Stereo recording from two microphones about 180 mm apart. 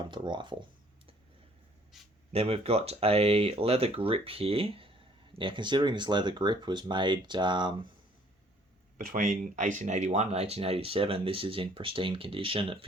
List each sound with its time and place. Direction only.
0.0 s a sound: 25° right (ahead or behind)
1.9 s speech: centre (ahead or behind)
2.3 s speech: 35° right (ahead or behind)
9.0 s speech: 45° right (ahead or behind); by 12.8 s 30° right (ahead or behind)